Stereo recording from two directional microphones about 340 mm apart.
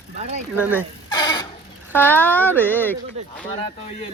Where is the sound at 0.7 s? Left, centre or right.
Centre.